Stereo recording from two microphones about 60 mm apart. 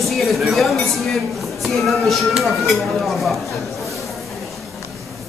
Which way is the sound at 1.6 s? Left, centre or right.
Centre.